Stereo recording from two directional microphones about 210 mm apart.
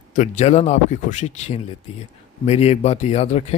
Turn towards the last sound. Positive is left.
turn(degrees=30)  # may be behind; listen again after turning